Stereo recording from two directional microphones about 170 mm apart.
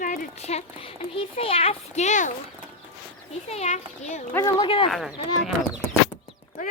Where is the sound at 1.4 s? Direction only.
35° left (ahead or behind).